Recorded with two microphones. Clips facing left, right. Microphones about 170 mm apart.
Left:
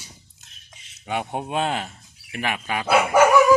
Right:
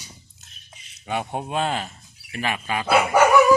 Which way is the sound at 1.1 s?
15° left (ahead or behind).